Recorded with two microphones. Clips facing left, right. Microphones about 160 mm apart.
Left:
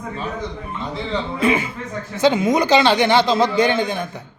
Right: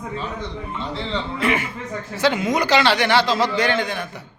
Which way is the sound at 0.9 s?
10° left (ahead or behind).